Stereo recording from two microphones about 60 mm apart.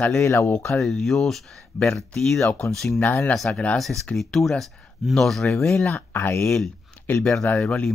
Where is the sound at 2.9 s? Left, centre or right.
Left.